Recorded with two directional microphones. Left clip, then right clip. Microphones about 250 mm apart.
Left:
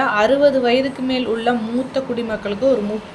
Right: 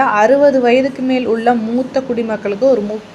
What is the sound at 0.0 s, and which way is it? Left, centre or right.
A woman's voice, centre.